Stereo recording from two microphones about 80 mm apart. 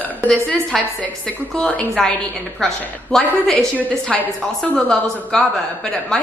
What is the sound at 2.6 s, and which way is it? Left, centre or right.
A woman's voice, centre.